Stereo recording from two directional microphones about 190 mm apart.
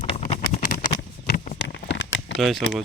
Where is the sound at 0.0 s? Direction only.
30° left (ahead or behind).